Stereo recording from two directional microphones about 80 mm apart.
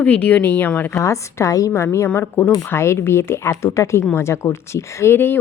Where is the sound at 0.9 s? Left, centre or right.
Left.